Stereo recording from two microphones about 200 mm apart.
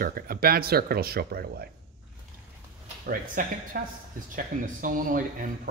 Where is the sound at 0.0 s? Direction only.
45° right (ahead or behind).